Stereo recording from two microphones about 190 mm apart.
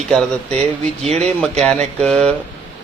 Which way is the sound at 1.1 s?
35° right (ahead or behind).